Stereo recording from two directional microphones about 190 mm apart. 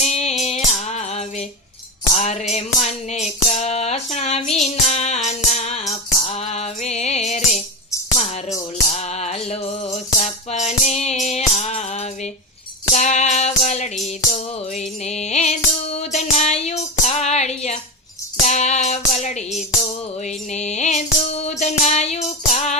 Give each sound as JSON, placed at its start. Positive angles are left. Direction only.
{"t": 0.0, "sound": "music", "side_deg": 35}
{"t": 8.9, "sound": "music", "side_deg": 35}